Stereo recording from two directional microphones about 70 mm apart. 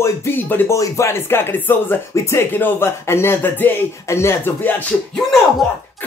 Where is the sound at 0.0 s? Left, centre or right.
Left.